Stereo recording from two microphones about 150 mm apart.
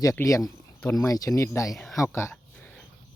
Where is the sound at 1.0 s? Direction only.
20° left (ahead or behind).